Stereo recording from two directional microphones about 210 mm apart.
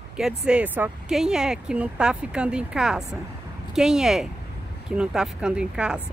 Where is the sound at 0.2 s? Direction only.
5° right (ahead or behind).